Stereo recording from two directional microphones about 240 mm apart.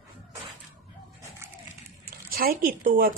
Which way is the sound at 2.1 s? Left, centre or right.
Right.